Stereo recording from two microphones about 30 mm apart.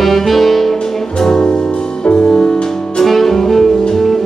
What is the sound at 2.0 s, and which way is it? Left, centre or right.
Music, left.